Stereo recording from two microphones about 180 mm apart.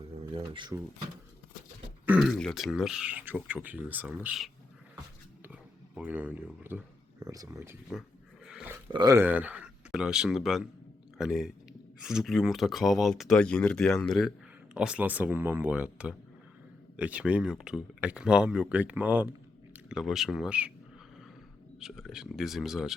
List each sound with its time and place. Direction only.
0.3 s speech: 25° right (ahead or behind)
2.0 s speech: 5° right (ahead or behind)
8.4 s a sound: 10° right (ahead or behind)
8.9 s speech: 20° right (ahead or behind)
9.2 s speech: 10° right (ahead or behind)
21.8 s speech: centre (ahead or behind)